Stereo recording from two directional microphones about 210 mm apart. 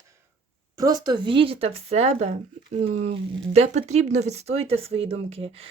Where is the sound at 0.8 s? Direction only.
20° right (ahead or behind).